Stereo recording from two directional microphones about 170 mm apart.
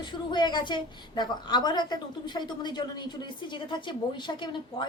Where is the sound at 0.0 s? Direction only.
25° left (ahead or behind).